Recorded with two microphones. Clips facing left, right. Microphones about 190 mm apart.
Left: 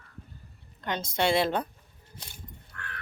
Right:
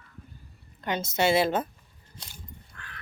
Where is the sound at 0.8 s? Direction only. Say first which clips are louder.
Right 2 dB; 5° right (ahead or behind).